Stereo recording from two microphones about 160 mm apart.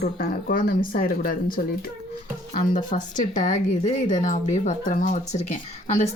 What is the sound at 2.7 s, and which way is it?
Speech, 55° left (ahead or behind).